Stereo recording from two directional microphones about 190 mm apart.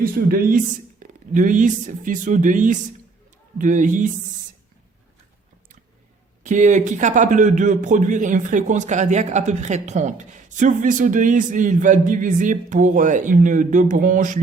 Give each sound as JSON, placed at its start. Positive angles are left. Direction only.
{"t": 0.0, "sound": "a man's voice", "side_deg": -50}
{"t": 6.4, "sound": "a man's voice", "side_deg": -40}